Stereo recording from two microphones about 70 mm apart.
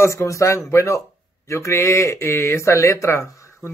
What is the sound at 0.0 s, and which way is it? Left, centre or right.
Speech, left.